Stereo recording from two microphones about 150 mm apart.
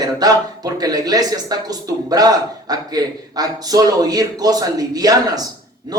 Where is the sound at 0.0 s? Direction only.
25° right (ahead or behind).